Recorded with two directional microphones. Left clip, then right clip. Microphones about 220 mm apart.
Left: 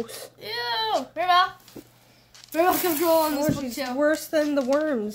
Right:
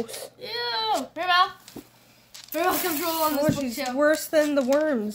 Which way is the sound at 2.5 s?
30° left (ahead or behind).